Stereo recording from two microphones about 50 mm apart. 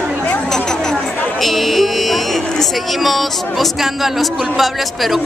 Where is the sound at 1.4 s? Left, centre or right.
Centre.